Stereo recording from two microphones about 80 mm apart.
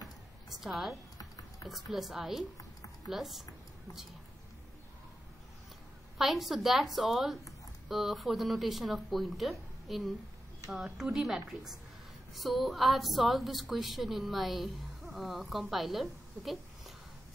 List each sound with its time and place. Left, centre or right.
0.5 s a woman's voice: centre
1.1 s a sound: left
1.7 s a woman's voice: centre
6.1 s a woman's voice: centre